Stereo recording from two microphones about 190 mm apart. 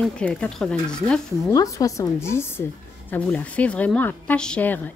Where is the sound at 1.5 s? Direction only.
15° left (ahead or behind).